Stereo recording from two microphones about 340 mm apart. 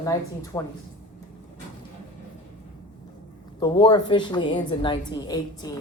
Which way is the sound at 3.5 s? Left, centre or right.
Centre.